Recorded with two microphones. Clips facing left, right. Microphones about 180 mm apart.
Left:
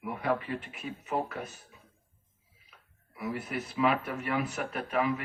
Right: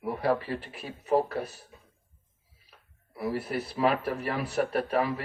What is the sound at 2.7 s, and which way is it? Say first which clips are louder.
Speech: right 2 dB; 35° right (ahead or behind).